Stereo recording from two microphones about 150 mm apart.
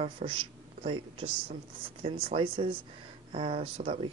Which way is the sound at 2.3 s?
35° right (ahead or behind).